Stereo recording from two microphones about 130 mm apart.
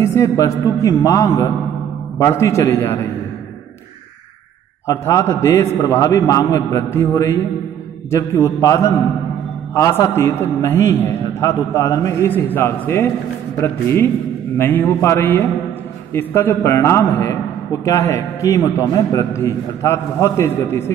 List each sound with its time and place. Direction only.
0.0 s a man's voice: 20° left (ahead or behind)
4.8 s a man's voice: 25° left (ahead or behind)
14.6 s mantra: 15° left (ahead or behind)
16.1 s a man's voice: 20° left (ahead or behind)